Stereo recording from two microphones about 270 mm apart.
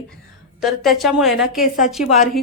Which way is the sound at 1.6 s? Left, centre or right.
Left.